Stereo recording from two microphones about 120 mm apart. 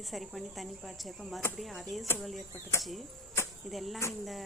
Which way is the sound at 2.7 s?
25° left (ahead or behind).